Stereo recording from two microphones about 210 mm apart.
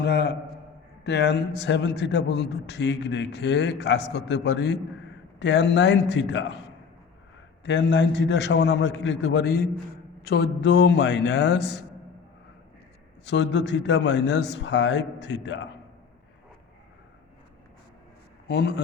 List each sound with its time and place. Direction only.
0.0 s a man's voice: 50° left (ahead or behind)
7.6 s a man's voice: 55° left (ahead or behind)
13.2 s a man's voice: 55° left (ahead or behind)
18.4 s a man's voice: 55° left (ahead or behind)